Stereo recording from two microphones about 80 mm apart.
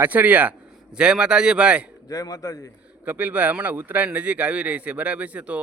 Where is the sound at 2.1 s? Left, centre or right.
Left.